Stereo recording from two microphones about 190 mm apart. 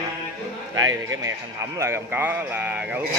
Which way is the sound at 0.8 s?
15° right (ahead or behind).